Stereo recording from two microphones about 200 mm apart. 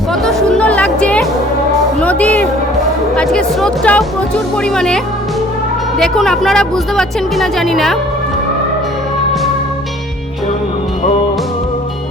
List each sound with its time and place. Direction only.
0.3 s music: 5° left (ahead or behind)
4.7 s speech: 5° left (ahead or behind)
6.0 s speech: centre (ahead or behind)